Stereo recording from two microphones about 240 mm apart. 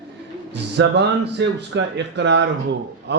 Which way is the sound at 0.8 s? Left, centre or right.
Right.